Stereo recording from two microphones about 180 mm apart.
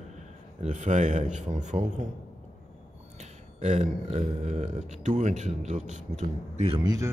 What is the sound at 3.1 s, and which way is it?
Speech, 40° right (ahead or behind).